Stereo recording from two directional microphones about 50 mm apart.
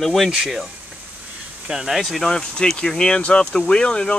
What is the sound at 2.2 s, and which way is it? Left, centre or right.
Speech, centre.